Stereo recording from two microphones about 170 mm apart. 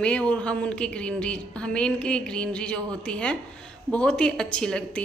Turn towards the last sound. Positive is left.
turn(degrees=5)  # may be behind; listen again after turning